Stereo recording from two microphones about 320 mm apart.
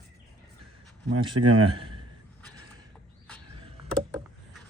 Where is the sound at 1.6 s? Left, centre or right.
Centre.